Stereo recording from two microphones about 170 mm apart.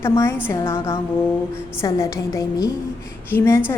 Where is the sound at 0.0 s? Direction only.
15° left (ahead or behind).